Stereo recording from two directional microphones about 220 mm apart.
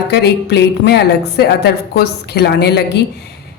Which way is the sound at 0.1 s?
50° left (ahead or behind).